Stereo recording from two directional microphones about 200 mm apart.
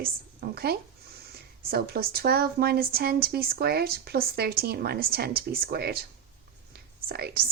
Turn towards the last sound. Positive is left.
turn(degrees=-50)  # may be behind; listen again after turning